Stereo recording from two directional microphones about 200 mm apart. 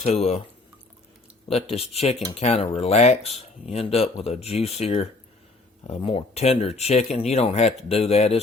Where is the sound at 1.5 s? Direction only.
30° left (ahead or behind).